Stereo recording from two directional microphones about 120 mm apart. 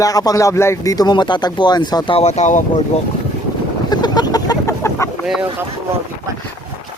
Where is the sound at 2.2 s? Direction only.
65° left (ahead or behind).